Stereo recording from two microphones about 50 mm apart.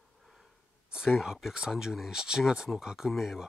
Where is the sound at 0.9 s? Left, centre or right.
Centre.